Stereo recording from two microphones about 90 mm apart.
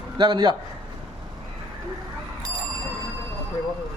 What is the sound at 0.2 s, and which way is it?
Speech, 65° right (ahead or behind).